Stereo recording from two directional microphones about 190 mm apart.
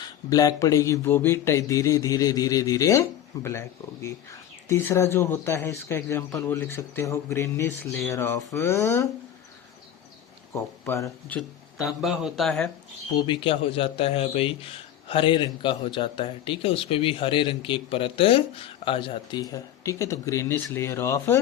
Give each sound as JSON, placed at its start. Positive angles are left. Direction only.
{"t": 0.0, "sound": "speech", "side_deg": 20}
{"t": 10.5, "sound": "speech", "side_deg": 15}
{"t": 11.3, "sound": "speech", "side_deg": 0}
{"t": 13.1, "sound": "a man's voice", "side_deg": 25}